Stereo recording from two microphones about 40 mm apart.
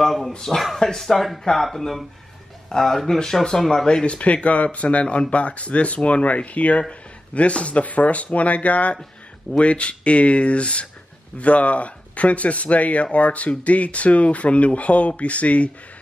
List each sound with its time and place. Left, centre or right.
0.0 s speech: centre
0.9 s speech: centre; by 5.0 s left
5.0 s speech: left
5.3 s speech: left